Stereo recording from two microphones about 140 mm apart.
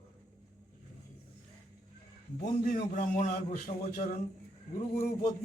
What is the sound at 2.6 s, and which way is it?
Speech, 75° left (ahead or behind).